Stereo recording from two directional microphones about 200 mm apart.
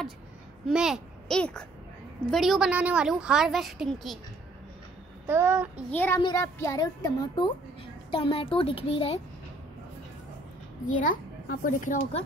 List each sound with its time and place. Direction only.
0.7 s a child's voice: 5° right (ahead or behind)
5.2 s a child's voice: 10° right (ahead or behind)
5.9 s a child's voice: 10° left (ahead or behind); by 9.2 s 30° left (ahead or behind)
10.9 s a child's voice: 40° left (ahead or behind)